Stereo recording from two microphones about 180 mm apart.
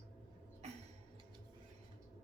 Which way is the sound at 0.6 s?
35° right (ahead or behind).